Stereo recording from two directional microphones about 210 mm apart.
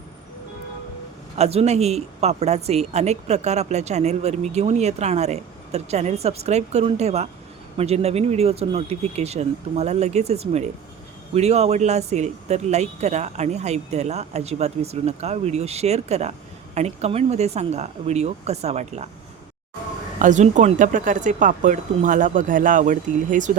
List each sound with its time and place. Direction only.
1.4 s speech: 30° right (ahead or behind)
20.1 s speech: 35° right (ahead or behind)